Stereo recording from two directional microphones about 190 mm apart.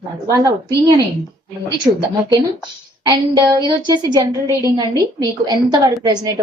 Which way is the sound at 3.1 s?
20° right (ahead or behind).